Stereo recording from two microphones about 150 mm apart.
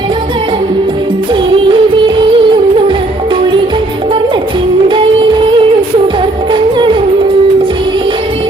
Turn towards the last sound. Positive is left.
turn(degrees=-35)  # may be behind; listen again after turning